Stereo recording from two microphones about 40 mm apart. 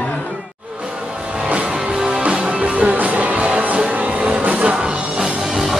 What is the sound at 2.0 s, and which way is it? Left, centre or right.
Music, right.